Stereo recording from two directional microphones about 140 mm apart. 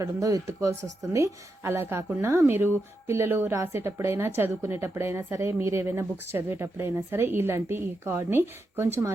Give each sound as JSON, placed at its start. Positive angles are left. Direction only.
{"t": 0.0, "sound": "speech", "side_deg": -25}